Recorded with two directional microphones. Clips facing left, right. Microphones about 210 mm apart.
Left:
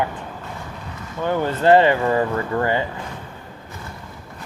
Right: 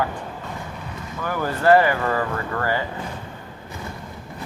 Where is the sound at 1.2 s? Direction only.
25° left (ahead or behind).